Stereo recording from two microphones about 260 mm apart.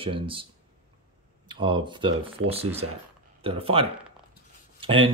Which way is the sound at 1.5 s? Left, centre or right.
Centre.